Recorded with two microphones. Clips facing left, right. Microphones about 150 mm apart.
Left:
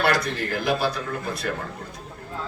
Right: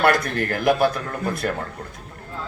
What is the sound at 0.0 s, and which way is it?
Speech, 50° right (ahead or behind).